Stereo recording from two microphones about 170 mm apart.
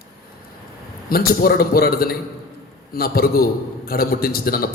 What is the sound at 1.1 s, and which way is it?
A man's voice, 60° left (ahead or behind).